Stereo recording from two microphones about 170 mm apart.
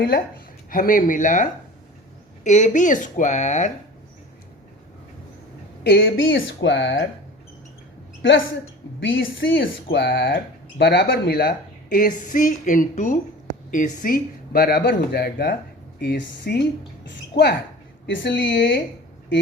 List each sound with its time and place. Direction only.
0.7 s speech: 55° left (ahead or behind)
5.8 s speech: 85° left
9.0 s speech: 90° left; by 17.5 s 75° left (ahead or behind)
18.0 s speech: 90° left